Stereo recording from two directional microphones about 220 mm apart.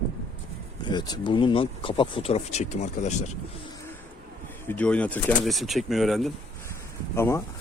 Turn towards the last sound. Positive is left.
turn(degrees=10)  # may be behind; listen again after turning